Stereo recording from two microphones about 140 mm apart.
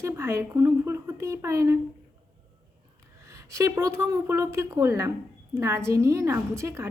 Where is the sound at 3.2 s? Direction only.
20° right (ahead or behind).